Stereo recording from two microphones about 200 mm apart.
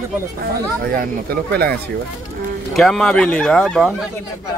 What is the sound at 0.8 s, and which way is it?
Speech, 45° right (ahead or behind).